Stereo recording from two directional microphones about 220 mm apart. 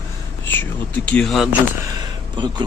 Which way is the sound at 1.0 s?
5° left (ahead or behind).